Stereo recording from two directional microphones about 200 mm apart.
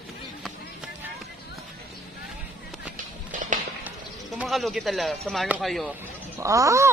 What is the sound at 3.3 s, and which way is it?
Run, 40° right (ahead or behind).